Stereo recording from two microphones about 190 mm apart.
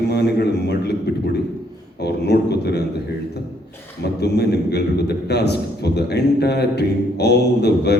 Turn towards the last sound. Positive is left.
turn(degrees=60)  # may be behind; listen again after turning